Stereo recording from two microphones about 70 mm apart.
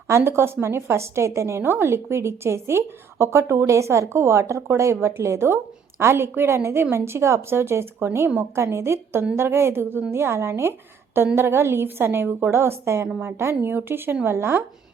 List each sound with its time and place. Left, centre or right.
0.3 s a woman's voice: right